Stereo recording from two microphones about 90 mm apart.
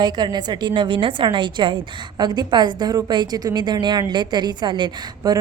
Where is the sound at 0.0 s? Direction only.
50° right (ahead or behind).